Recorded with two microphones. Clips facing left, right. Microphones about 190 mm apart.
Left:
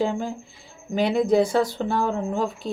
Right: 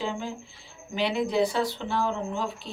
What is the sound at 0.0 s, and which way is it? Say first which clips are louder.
Speech: left 7 dB; 45° left (ahead or behind).